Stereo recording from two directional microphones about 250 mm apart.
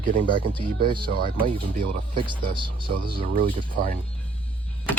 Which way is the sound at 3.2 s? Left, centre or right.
Right.